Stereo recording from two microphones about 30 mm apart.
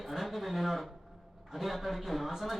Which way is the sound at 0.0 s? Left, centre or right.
Centre.